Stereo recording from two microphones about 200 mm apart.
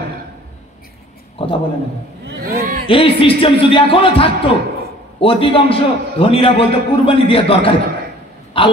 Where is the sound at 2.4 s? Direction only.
45° right (ahead or behind).